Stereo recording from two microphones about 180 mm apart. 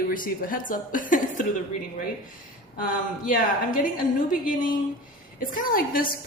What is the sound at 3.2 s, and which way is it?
Speech, 50° left (ahead or behind).